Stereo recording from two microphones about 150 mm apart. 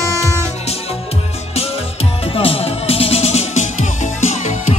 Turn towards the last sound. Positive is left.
turn(degrees=50)  # may be behind; listen again after turning